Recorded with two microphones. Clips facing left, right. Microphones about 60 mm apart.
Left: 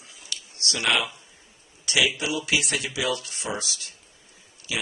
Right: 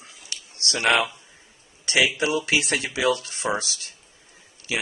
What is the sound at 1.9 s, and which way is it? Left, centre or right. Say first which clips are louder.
Speech: right 3 dB; right.